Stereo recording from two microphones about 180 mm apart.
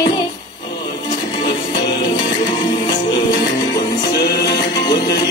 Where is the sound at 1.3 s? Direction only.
25° left (ahead or behind).